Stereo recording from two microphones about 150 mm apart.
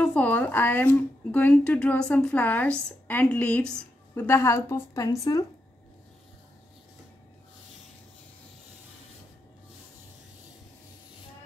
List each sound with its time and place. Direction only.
0.0 s a woman's voice: 10° left (ahead or behind)